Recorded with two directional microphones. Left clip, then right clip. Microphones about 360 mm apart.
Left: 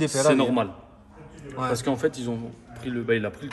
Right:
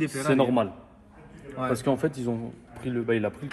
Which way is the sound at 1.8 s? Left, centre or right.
Centre.